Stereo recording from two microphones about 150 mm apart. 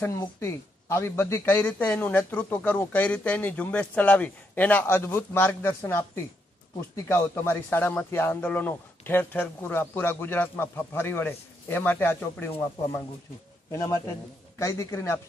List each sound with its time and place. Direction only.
0.4 s a man's voice: 20° left (ahead or behind)
13.7 s a man's voice: 20° left (ahead or behind)